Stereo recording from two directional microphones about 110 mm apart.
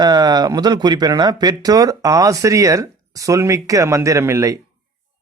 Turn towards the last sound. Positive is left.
turn(degrees=-25)  # may be behind; listen again after turning